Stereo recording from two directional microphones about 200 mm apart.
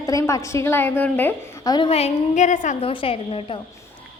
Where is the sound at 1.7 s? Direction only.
30° left (ahead or behind).